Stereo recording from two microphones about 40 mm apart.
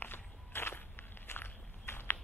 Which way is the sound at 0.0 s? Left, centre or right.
Left.